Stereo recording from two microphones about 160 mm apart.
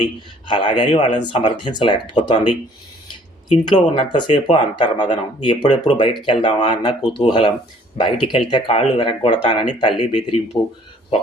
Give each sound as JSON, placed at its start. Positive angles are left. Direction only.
{"t": 0.0, "sound": "speech", "side_deg": 30}